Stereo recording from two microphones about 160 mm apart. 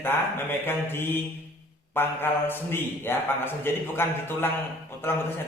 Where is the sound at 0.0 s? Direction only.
15° left (ahead or behind).